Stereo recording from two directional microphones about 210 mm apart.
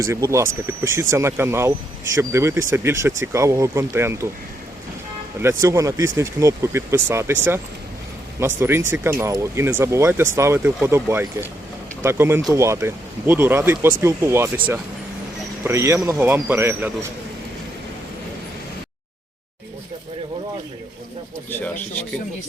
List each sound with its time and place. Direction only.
0.0 s speech: 15° right (ahead or behind)
5.4 s speech: 15° right (ahead or behind)
8.4 s speech: 10° right (ahead or behind)
21.5 s a sound: 10° left (ahead or behind)